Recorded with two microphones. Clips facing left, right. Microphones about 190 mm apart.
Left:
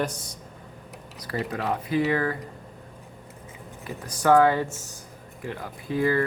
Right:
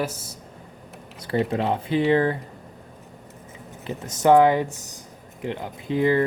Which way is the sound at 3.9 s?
25° right (ahead or behind).